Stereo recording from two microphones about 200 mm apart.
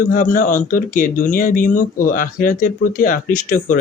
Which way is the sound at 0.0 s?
40° left (ahead or behind).